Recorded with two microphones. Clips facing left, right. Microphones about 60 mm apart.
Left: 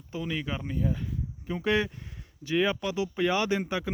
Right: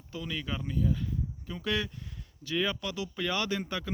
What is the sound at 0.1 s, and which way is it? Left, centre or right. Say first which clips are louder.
Speech: left 4 dB; left.